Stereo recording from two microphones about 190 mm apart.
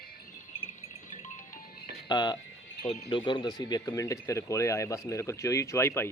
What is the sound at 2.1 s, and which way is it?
Speech, 20° left (ahead or behind).